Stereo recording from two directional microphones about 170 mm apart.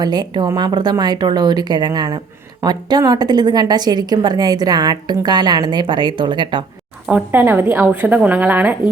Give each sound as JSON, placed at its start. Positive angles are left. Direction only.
{"t": 0.0, "sound": "speech", "side_deg": -25}
{"t": 7.1, "sound": "a woman's voice", "side_deg": -10}